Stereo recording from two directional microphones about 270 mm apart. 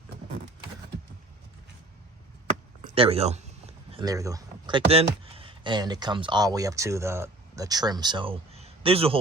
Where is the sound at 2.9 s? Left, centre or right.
Right.